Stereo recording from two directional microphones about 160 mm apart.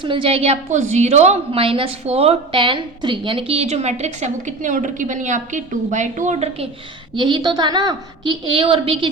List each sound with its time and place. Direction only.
0.0 s a woman's voice: 35° right (ahead or behind)
7.2 s a woman's voice: 30° right (ahead or behind)